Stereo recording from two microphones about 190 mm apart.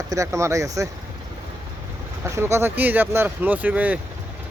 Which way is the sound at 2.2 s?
15° right (ahead or behind).